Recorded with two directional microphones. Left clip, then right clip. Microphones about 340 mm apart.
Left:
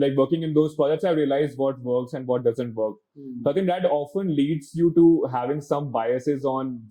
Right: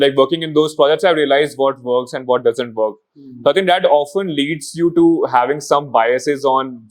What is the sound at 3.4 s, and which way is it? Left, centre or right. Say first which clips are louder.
Speech: right 10 dB; centre.